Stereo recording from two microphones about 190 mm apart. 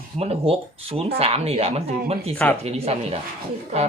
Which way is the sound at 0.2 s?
30° right (ahead or behind).